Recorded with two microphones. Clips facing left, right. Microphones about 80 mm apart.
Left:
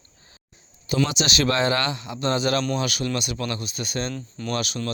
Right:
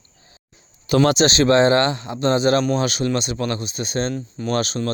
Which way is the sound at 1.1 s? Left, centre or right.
Right.